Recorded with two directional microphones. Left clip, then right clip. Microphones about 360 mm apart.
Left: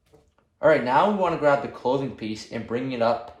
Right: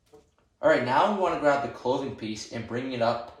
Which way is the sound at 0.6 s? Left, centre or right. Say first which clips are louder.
Left 3 dB; left.